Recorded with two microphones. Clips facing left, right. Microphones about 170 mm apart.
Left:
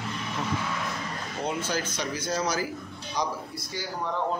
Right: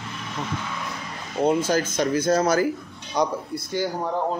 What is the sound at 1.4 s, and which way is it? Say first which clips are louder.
Speech: right 10 dB; 45° right (ahead or behind).